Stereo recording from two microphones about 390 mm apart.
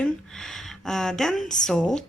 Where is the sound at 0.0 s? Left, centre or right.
Centre.